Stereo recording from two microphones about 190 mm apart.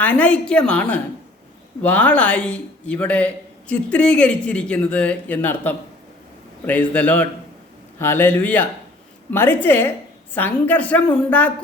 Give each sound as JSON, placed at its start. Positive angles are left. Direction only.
{"t": 0.0, "sound": "speech", "side_deg": 10}